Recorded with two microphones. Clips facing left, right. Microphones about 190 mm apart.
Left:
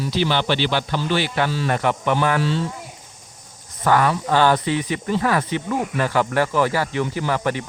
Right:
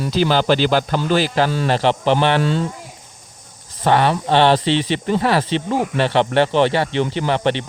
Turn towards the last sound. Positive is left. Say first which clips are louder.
# right 4 dB
turn(degrees=-25)  # may be behind; listen again after turning